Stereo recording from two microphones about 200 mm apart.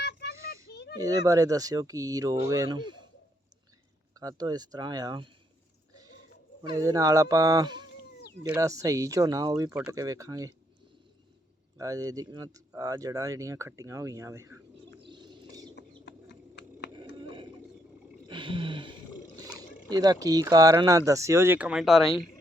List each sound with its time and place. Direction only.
0.0 s a sound: 55° left (ahead or behind)
0.9 s speech: 15° right (ahead or behind)
4.1 s speech: 20° right (ahead or behind)
6.6 s speech: 15° right (ahead or behind)
11.8 s speech: 15° right (ahead or behind)
15.0 s bird: 25° right (ahead or behind)
15.7 s bird: 60° left (ahead or behind)
17.2 s a sound: 25° right (ahead or behind)
19.5 s speech: 20° right (ahead or behind); by 22.1 s centre (ahead or behind)